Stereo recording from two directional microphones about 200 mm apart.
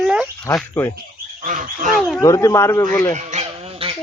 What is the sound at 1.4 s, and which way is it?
Speech, 40° right (ahead or behind).